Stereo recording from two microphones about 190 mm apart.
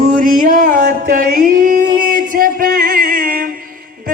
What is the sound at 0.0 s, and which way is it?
Music, 45° right (ahead or behind).